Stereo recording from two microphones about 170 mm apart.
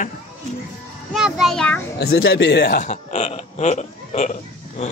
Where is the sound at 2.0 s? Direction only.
65° left (ahead or behind); by 4.3 s 45° left (ahead or behind).